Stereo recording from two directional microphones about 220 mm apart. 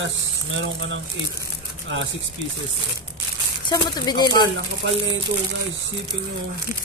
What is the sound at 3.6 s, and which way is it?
Speech, 20° left (ahead or behind).